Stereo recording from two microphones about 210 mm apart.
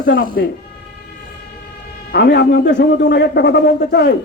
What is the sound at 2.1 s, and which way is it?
A man's voice, 50° left (ahead or behind).